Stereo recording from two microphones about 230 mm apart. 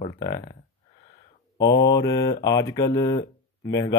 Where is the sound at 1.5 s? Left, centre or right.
Centre.